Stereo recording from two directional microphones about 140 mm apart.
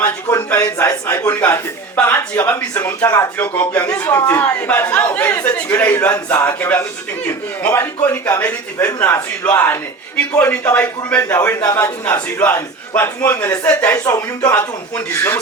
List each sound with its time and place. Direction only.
0.0 s a man's voice: 15° left (ahead or behind)